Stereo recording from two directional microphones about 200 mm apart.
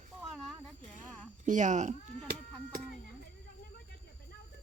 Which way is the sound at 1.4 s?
40° right (ahead or behind).